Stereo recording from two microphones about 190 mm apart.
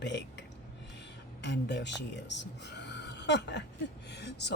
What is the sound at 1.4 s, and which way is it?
Speech, 65° left (ahead or behind).